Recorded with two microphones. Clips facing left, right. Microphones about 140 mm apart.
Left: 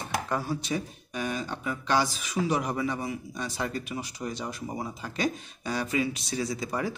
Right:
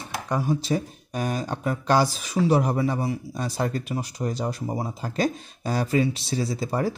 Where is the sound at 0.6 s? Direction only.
35° right (ahead or behind).